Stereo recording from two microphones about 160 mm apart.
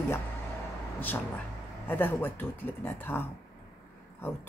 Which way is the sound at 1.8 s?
10° left (ahead or behind).